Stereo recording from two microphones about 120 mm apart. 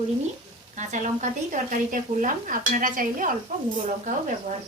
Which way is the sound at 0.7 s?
90° right.